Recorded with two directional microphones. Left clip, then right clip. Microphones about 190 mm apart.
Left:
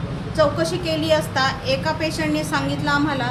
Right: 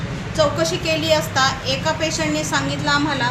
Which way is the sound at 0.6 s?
20° left (ahead or behind).